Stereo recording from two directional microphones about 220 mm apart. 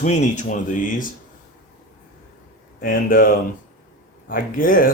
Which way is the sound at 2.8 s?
40° left (ahead or behind).